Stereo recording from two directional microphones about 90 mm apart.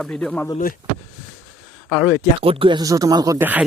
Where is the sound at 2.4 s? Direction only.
85° right.